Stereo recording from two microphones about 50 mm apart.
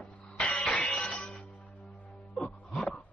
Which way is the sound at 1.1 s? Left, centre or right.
Centre.